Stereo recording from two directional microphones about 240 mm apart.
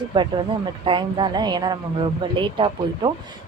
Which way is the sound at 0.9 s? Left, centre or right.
Centre.